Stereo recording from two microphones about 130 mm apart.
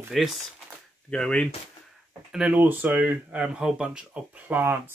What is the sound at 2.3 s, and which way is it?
Speech, 10° right (ahead or behind).